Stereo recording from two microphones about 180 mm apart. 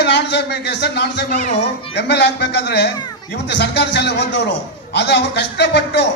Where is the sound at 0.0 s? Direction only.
70° left (ahead or behind).